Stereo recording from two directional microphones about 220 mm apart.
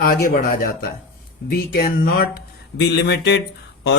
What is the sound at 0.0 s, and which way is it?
A man's voice, 40° left (ahead or behind).